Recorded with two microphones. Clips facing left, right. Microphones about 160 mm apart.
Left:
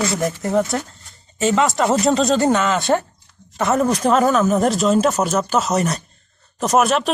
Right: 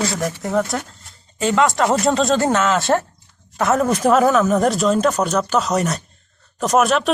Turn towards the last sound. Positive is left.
turn(degrees=0)  # may be behind; listen again after turning